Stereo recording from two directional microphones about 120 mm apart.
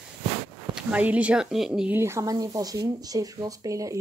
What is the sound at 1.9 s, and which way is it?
Speech, 20° right (ahead or behind).